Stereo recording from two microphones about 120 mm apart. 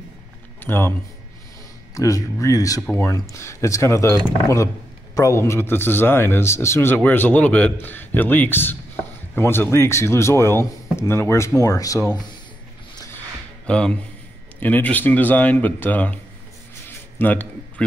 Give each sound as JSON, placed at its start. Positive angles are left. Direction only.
{"t": 0.6, "sound": "speech", "side_deg": 20}
{"t": 2.0, "sound": "speech", "side_deg": 30}
{"t": 5.1, "sound": "speech", "side_deg": 25}
{"t": 13.7, "sound": "speech", "side_deg": 10}
{"t": 16.8, "sound": "a sound", "side_deg": 15}